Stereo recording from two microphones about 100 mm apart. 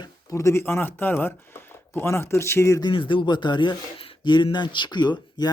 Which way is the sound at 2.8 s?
50° left (ahead or behind).